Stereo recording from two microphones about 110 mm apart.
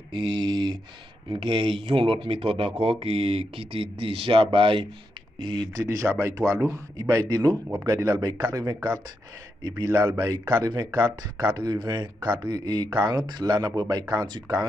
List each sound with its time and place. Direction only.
0.1 s a sound: 50° right (ahead or behind)
1.3 s speech: 50° right (ahead or behind)
5.9 s speech: 30° right (ahead or behind)